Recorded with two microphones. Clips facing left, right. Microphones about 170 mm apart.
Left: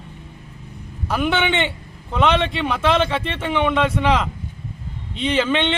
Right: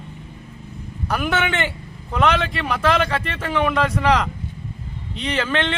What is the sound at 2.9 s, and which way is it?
Speech, 25° left (ahead or behind).